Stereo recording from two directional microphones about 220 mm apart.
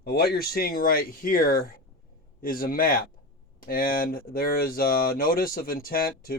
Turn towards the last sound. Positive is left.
turn(degrees=40)  # may be behind; listen again after turning